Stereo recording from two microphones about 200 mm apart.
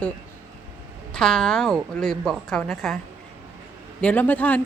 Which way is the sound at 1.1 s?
5° left (ahead or behind).